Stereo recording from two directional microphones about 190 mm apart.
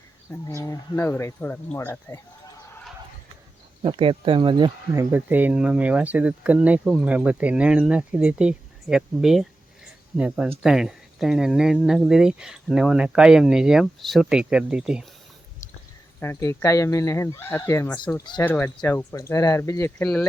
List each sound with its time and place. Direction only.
0.3 s speech: 15° left (ahead or behind)
3.8 s speech: 30° right (ahead or behind)
5.1 s speech: 10° right (ahead or behind)
16.2 s speech: 15° left (ahead or behind)